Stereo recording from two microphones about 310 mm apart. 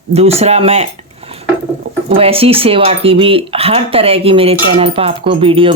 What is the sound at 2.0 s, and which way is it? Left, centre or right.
Speech, centre.